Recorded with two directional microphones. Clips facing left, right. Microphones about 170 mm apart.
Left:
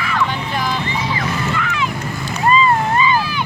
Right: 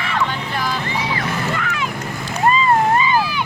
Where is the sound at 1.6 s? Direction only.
45° right (ahead or behind).